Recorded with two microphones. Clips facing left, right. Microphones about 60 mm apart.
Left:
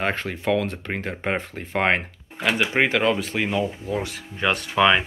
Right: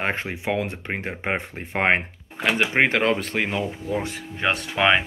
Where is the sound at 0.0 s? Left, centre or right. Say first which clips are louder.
Left 1 dB; right.